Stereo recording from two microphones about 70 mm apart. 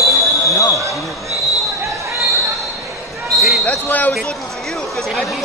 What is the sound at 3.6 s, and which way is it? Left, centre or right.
Speech, left.